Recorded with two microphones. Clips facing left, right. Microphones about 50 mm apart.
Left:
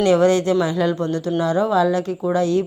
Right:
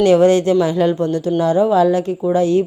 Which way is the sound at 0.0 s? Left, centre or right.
Right.